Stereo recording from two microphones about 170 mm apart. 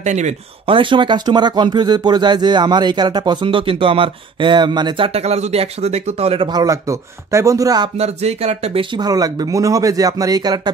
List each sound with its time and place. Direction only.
0.0 s speech: 45° right (ahead or behind); by 7.9 s 20° right (ahead or behind)
8.0 s speech: 40° right (ahead or behind)